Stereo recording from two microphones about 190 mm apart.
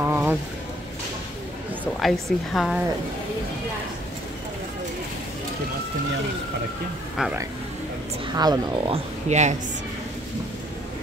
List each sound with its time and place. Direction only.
0.0 s a sound: 10° right (ahead or behind)
2.0 s a woman's voice: centre (ahead or behind)
8.3 s a woman's voice: 20° right (ahead or behind); by 9.6 s 40° right (ahead or behind)